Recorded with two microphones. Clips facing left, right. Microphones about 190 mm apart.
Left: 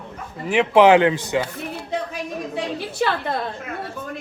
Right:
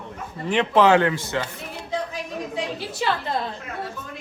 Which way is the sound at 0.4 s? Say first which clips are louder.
Left 4 dB; 10° left (ahead or behind).